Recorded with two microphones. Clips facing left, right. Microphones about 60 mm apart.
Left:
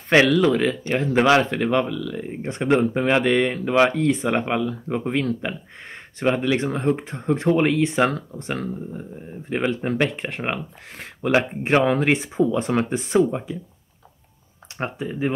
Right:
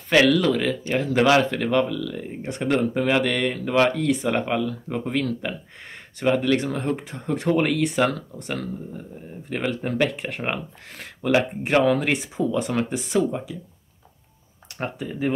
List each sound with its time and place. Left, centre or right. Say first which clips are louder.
0.1 s speech: left 2 dB; left
2.4 s speech: left 3 dB; left
14.8 s speech: left 2 dB; left